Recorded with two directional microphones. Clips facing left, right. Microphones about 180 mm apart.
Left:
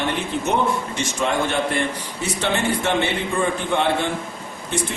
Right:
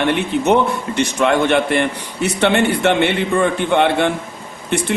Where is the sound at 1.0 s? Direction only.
70° right (ahead or behind).